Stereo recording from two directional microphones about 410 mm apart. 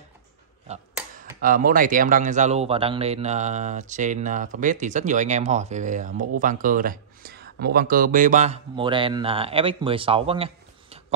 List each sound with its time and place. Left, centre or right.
1.4 s speech: centre